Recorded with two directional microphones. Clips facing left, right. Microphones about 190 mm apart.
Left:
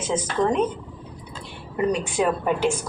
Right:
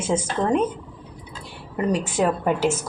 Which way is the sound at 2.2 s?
5° left (ahead or behind).